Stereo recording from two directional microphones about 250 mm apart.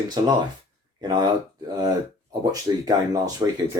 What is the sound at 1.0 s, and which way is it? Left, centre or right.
Speech, centre.